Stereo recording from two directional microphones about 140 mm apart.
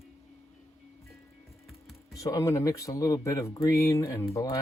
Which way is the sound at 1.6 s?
Centre (ahead or behind).